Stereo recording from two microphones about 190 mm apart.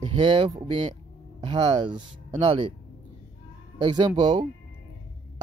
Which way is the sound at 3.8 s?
25° right (ahead or behind).